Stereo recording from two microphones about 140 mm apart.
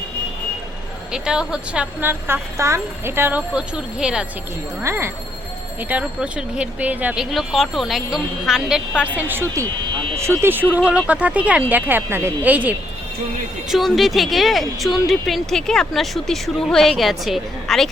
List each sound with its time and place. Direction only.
1.1 s speech: 5° right (ahead or behind)
4.8 s speech: 20° right (ahead or behind)
9.1 s speech: 15° right (ahead or behind)
13.7 s speech: centre (ahead or behind)